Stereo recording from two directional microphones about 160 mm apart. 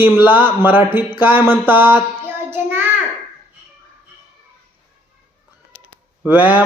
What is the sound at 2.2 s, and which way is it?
Child singing, 15° right (ahead or behind).